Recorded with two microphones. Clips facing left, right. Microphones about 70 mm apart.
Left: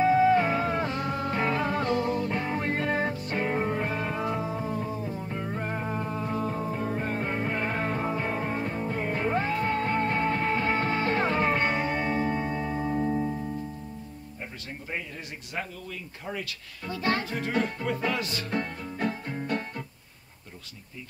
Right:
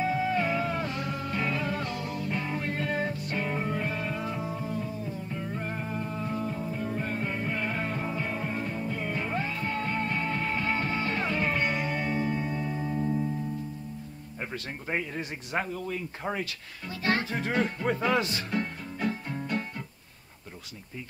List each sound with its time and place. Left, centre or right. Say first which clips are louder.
0.0 s music: left 7 dB; left
15.5 s music: right 4 dB; right
17.8 s music: right 3 dB; right
18.9 s music: left 1 dB; left